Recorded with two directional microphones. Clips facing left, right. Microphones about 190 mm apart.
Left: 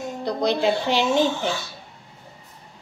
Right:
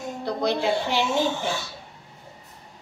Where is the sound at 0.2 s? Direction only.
20° left (ahead or behind).